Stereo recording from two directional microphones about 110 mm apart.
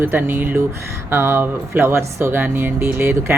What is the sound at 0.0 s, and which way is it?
Speech, 20° right (ahead or behind).